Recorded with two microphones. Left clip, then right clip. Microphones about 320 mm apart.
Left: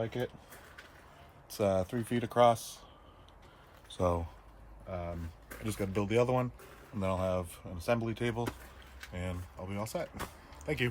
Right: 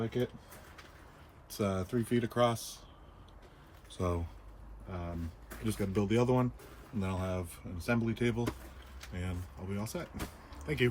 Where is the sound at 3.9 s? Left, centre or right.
Centre.